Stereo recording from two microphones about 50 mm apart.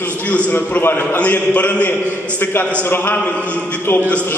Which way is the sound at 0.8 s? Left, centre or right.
Left.